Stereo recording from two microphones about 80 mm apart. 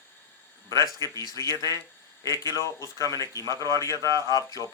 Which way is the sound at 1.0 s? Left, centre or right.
Left.